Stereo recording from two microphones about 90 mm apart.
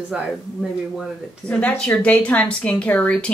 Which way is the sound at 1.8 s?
15° left (ahead or behind).